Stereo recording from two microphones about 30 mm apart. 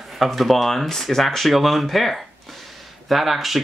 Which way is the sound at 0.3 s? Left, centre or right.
Centre.